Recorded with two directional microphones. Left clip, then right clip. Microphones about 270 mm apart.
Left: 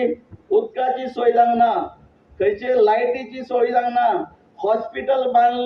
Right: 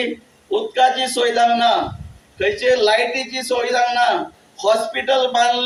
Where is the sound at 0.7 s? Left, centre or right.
Right.